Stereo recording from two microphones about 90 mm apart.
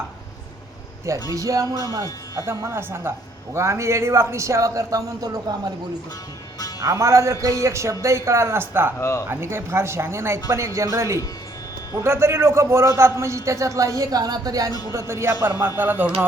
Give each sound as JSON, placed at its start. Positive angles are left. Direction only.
{"t": 1.3, "sound": "a man's voice", "side_deg": -40}
{"t": 6.7, "sound": "a man's voice", "side_deg": -35}
{"t": 9.0, "sound": "speech", "side_deg": 30}
{"t": 9.2, "sound": "a man's voice", "side_deg": -25}
{"t": 14.9, "sound": "a man's voice", "side_deg": -30}
{"t": 15.8, "sound": "speech", "side_deg": -20}